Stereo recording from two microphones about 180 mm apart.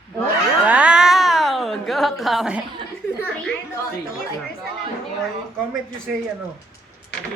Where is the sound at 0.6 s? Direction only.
5° right (ahead or behind).